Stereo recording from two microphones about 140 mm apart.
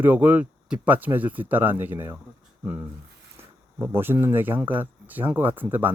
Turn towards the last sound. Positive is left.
turn(degrees=-15)  # may be behind; listen again after turning